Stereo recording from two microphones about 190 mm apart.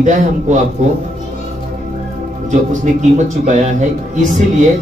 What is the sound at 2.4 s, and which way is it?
A man's voice, 40° right (ahead or behind).